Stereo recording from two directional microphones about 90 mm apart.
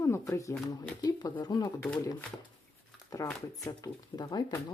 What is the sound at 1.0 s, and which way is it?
Speech, 50° left (ahead or behind).